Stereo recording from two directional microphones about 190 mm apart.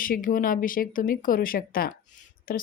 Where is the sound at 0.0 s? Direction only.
45° left (ahead or behind).